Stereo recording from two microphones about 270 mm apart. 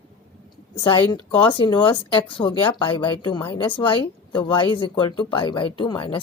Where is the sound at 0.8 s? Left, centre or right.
Centre.